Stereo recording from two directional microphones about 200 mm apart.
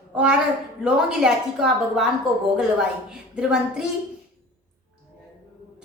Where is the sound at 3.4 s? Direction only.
5° right (ahead or behind).